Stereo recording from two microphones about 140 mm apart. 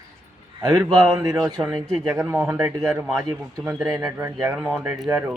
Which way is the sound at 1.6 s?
Centre (ahead or behind).